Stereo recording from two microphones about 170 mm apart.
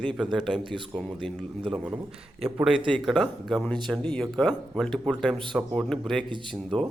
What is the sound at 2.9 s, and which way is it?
Speech, centre (ahead or behind).